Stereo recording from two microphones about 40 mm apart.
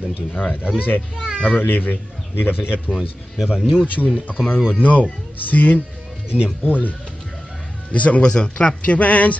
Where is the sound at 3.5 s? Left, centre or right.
Centre.